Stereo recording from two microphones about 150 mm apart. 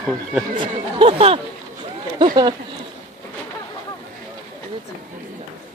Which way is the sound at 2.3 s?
25° right (ahead or behind).